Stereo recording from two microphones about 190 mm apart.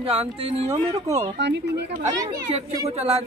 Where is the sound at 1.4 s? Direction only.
65° right (ahead or behind).